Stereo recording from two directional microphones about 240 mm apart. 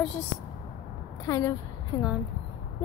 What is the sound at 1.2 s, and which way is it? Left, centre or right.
Speech, centre.